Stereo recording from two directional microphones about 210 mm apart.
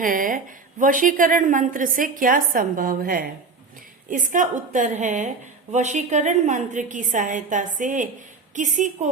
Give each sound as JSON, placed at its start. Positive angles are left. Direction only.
{"t": 0.0, "sound": "a woman's voice", "side_deg": -40}